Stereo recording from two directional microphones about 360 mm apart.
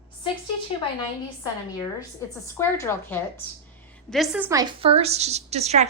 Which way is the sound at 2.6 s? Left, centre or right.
Centre.